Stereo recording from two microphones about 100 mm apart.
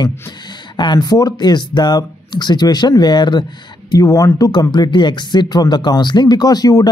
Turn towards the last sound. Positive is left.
turn(degrees=40)  # may be behind; listen again after turning